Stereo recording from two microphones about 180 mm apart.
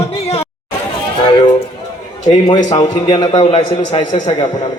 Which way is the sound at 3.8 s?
40° left (ahead or behind).